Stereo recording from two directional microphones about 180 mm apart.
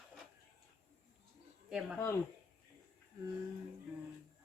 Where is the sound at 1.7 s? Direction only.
Centre (ahead or behind).